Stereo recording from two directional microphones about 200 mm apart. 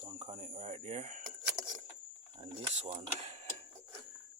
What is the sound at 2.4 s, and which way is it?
Speech, 30° right (ahead or behind).